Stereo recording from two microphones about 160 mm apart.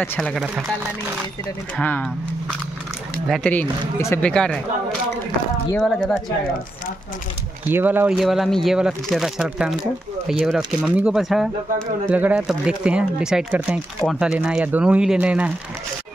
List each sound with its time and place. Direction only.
0.0 s speech: 10° left (ahead or behind)
0.3 s speech: centre (ahead or behind)
1.8 s speech: 10° left (ahead or behind)
3.3 s speech: centre (ahead or behind)
4.0 s speech: 15° left (ahead or behind)
4.3 s speech: 5° left (ahead or behind)
5.8 s speech: 5° left (ahead or behind)
7.7 s speech: 10° right (ahead or behind)
8.2 s speech: centre (ahead or behind)